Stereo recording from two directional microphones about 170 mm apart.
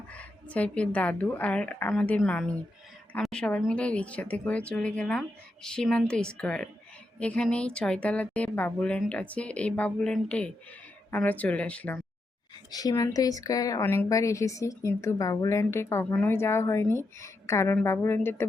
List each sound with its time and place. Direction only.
0.1 s a woman's voice: 10° left (ahead or behind)
12.7 s a woman's voice: 20° left (ahead or behind)